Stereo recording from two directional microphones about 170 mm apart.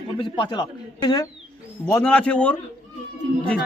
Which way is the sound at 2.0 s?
5° left (ahead or behind).